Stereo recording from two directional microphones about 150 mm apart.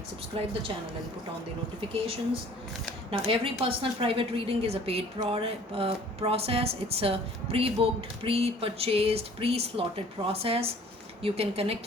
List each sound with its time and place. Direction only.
0.3 s a woman's voice: 40° right (ahead or behind)
3.1 s a woman's voice: 35° right (ahead or behind)